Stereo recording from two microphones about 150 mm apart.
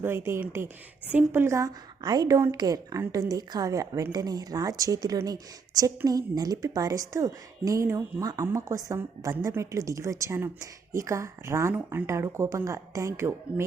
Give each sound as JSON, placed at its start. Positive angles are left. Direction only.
{"t": 0.0, "sound": "a woman's voice", "side_deg": -15}